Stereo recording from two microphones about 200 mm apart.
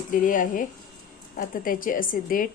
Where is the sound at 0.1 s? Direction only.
40° left (ahead or behind).